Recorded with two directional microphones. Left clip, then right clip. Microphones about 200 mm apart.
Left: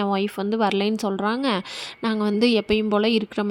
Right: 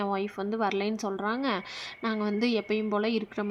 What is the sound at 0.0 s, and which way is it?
A woman's voice, 30° left (ahead or behind).